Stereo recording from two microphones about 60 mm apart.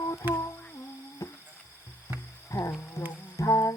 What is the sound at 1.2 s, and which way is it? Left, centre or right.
Music, left.